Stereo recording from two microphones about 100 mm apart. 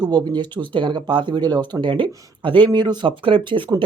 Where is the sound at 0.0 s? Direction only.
40° right (ahead or behind).